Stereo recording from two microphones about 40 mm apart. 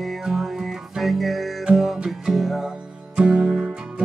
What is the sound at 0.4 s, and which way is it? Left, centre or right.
Music, centre.